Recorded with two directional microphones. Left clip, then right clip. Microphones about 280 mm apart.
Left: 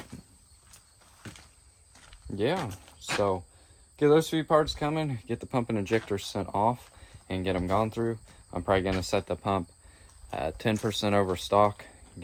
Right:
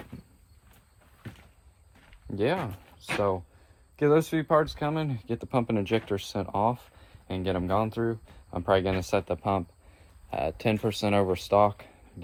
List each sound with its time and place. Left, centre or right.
2.3 s speech: centre